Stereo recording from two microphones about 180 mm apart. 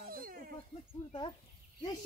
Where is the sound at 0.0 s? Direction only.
55° right (ahead or behind).